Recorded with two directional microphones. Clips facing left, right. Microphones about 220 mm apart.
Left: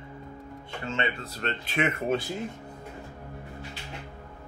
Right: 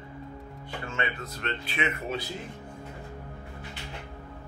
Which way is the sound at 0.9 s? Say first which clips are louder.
Left 3 dB; 25° left (ahead or behind).